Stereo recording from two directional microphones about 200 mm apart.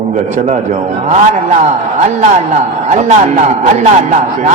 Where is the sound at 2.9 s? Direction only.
35° right (ahead or behind).